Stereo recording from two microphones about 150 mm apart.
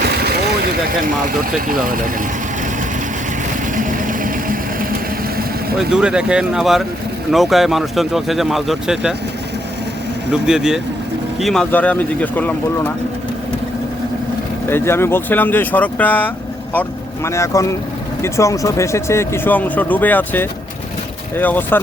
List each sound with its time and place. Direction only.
0.6 s speech: 75° right (ahead or behind)
3.8 s vehicle: 60° right (ahead or behind)
5.7 s speech: 5° right (ahead or behind)
10.4 s speech: 5° right (ahead or behind)
14.7 s speech: 15° left (ahead or behind)